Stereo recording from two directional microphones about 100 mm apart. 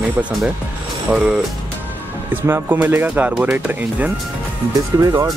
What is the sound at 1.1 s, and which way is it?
Speech, 10° right (ahead or behind).